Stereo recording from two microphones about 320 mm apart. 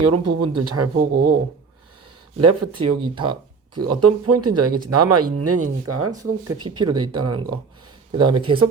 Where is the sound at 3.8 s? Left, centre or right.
Right.